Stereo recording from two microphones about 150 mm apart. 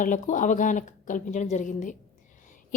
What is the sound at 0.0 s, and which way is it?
A woman's voice, 60° left (ahead or behind).